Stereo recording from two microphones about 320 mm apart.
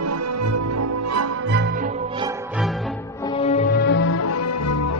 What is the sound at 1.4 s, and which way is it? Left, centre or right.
Music, right.